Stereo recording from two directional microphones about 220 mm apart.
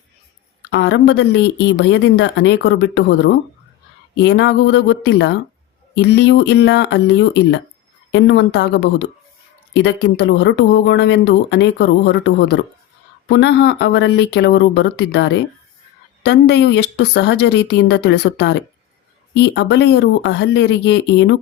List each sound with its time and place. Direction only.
0.7 s speech: 50° left (ahead or behind)